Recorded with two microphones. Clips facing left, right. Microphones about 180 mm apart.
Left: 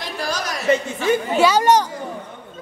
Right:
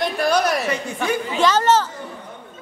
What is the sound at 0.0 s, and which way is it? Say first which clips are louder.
Chuckle: right 7 dB; 60° right (ahead or behind).